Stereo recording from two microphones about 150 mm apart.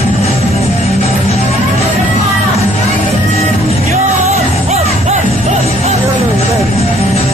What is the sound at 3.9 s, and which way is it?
Music, 45° right (ahead or behind).